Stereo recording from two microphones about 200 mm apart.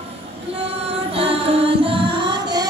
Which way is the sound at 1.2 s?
30° right (ahead or behind).